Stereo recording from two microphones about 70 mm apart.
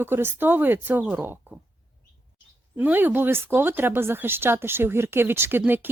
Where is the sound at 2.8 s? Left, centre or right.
Right.